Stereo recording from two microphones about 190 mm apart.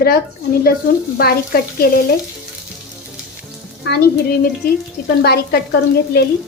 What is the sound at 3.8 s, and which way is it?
A woman's voice, 60° left (ahead or behind).